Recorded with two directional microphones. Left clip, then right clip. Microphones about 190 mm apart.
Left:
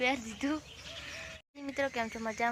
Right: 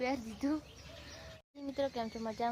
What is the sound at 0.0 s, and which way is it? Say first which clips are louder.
Speech: left 4 dB; 15° left (ahead or behind).